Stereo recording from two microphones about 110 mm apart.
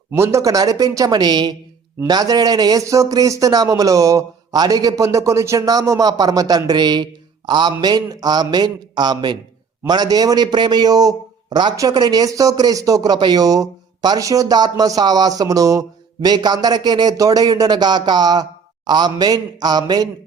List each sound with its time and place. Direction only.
0.1 s a man's voice: 25° right (ahead or behind)